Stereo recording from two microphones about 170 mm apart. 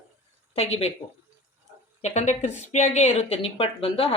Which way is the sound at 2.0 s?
40° left (ahead or behind).